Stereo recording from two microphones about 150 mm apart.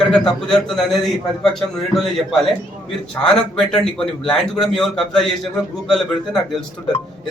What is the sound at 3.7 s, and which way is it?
A man's voice, 5° left (ahead or behind).